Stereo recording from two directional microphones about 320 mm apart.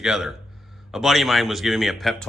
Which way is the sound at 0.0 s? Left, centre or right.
Centre.